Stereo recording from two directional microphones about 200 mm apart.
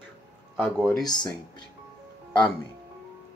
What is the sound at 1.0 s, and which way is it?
Speech, 20° left (ahead or behind).